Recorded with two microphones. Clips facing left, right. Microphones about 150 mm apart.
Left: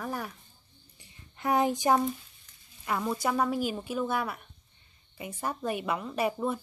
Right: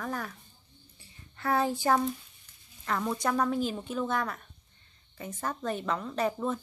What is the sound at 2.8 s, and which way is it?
Speech, 10° left (ahead or behind).